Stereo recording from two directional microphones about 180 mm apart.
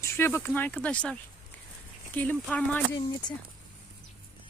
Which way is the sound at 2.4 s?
5° left (ahead or behind).